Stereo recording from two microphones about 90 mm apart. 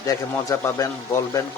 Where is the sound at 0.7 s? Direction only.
35° left (ahead or behind).